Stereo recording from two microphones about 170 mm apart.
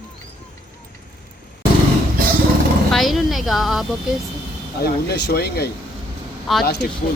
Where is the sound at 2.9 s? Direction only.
Centre (ahead or behind).